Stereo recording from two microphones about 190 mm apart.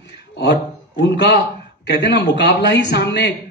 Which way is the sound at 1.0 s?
60° left (ahead or behind).